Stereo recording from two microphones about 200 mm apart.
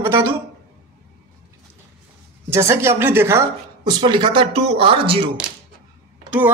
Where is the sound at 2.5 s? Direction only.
15° right (ahead or behind).